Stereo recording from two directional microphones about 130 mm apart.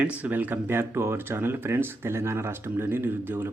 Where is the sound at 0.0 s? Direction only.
15° right (ahead or behind).